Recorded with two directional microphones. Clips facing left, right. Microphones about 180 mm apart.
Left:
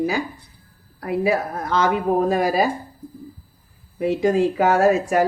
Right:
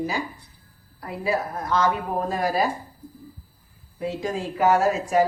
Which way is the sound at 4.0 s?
65° left (ahead or behind).